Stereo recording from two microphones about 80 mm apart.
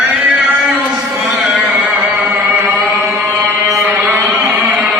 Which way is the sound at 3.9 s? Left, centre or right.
Centre.